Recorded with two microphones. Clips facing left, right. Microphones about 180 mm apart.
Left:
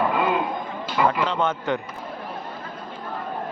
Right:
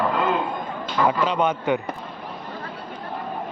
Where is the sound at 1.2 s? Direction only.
15° right (ahead or behind).